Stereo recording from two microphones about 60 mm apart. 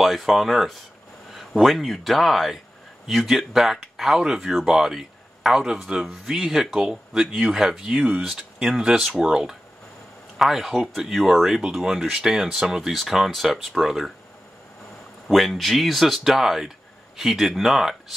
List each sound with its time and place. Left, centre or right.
0.0 s speech: centre
15.2 s speech: centre